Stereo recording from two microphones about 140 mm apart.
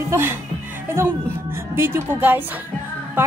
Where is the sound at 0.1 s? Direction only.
15° right (ahead or behind).